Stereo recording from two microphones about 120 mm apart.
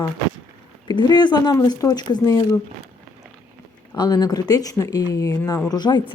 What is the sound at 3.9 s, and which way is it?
Speech, 35° left (ahead or behind).